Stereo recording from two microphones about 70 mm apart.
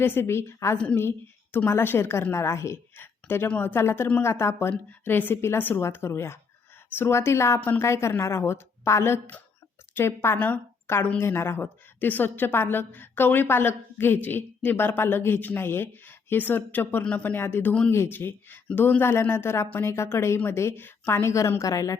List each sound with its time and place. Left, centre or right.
0.0 s a woman's voice: left
2.9 s a sound: left
3.6 s a woman's voice: left
4.9 s a woman's voice: left
10.3 s a woman's voice: left
10.8 s a woman's voice: left
17.0 s speech: centre
17.3 s a woman's voice: left